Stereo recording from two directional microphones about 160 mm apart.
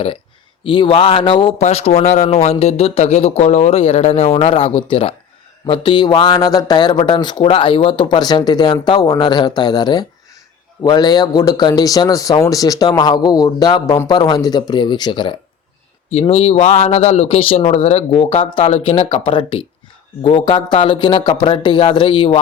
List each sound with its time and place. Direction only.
0.6 s speech: 30° left (ahead or behind)